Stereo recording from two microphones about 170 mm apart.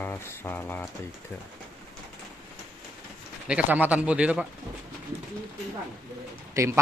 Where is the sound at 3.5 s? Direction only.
10° right (ahead or behind).